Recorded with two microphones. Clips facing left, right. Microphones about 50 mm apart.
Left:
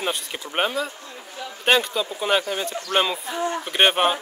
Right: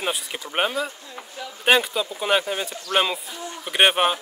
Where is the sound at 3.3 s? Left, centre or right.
Left.